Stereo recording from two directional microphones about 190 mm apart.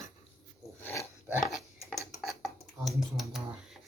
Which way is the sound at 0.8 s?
15° left (ahead or behind).